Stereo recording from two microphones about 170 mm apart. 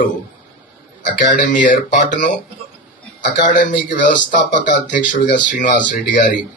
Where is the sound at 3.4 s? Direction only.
50° left (ahead or behind).